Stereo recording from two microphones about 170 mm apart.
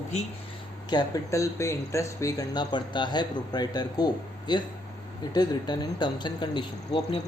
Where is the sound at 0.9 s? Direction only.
20° left (ahead or behind).